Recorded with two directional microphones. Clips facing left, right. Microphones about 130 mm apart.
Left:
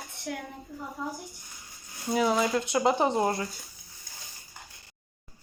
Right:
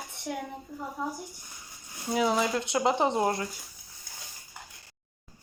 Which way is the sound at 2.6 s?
25° right (ahead or behind).